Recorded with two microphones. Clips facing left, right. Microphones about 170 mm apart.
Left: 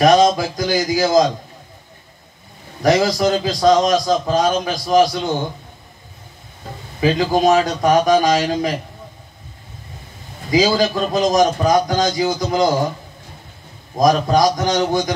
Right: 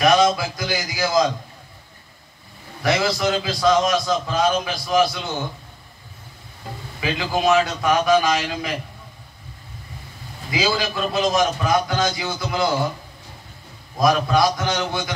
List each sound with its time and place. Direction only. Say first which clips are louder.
0.0 s a man's voice: left 4 dB; 40° left (ahead or behind)
2.8 s a man's voice: left 6 dB; 40° left (ahead or behind)
7.0 s a man's voice: left 7 dB; 40° left (ahead or behind)
10.5 s a man's voice: left 7 dB; 40° left (ahead or behind)
13.9 s a man's voice: left 4 dB; 40° left (ahead or behind)